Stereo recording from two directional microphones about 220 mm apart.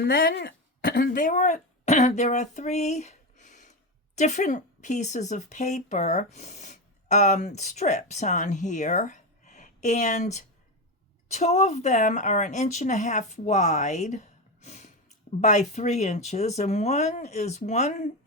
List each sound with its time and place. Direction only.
0.0 s a woman's voice: 40° left (ahead or behind)